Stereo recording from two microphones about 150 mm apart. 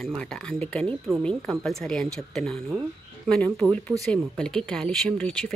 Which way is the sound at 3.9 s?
15° right (ahead or behind).